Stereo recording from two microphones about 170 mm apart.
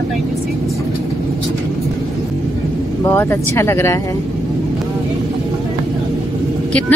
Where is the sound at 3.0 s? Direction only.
15° left (ahead or behind).